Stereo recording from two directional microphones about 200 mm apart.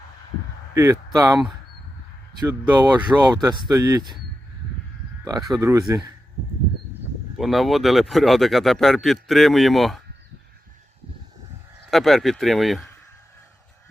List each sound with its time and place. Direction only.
0.7 s speech: 15° right (ahead or behind)
2.4 s speech: 20° right (ahead or behind)
5.5 s speech: 15° right (ahead or behind)
7.3 s speech: centre (ahead or behind)
11.9 s speech: centre (ahead or behind)